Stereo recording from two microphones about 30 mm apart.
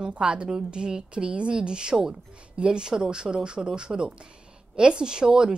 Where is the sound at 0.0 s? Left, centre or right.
Right.